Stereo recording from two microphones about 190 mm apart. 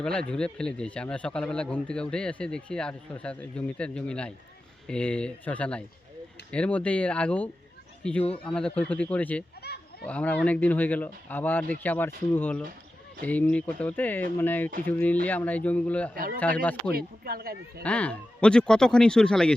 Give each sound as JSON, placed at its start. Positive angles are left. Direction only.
{"t": 0.0, "sound": "a man's voice", "side_deg": 5}
{"t": 9.6, "sound": "cattle", "side_deg": 55}
{"t": 10.1, "sound": "speech", "side_deg": 10}
{"t": 16.1, "sound": "speech", "side_deg": -50}
{"t": 16.4, "sound": "speech", "side_deg": 10}
{"t": 16.9, "sound": "speech", "side_deg": -50}
{"t": 17.8, "sound": "a man's voice", "side_deg": 5}